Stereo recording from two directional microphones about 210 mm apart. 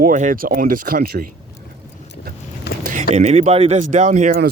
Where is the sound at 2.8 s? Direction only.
40° right (ahead or behind).